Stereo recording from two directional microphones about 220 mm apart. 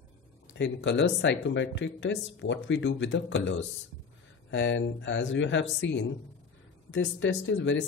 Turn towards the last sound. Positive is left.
turn(degrees=55)  # may be behind; listen again after turning